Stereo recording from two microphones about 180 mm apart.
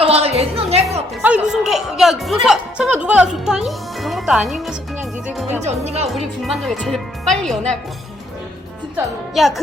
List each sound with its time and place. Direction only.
0.0 s music: 35° right (ahead or behind)
1.1 s speech: 5° right (ahead or behind)
5.6 s speech: 35° right (ahead or behind)
6.4 s speech: centre (ahead or behind)
9.3 s speech: centre (ahead or behind)